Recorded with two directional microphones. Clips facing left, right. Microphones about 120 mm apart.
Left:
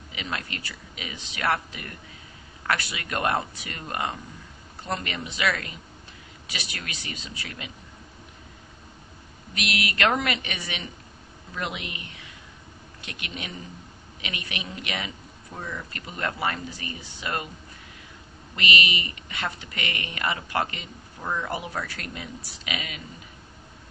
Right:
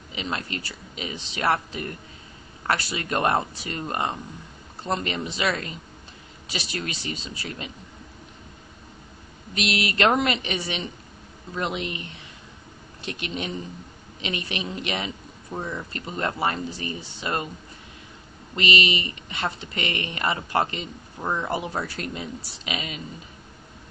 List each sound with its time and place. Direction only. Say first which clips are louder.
0.1 s a woman's voice: right 3 dB; 30° right (ahead or behind)
9.6 s a woman's voice: right 3 dB; 30° right (ahead or behind)
18.5 s a woman's voice: right 3 dB; 30° right (ahead or behind)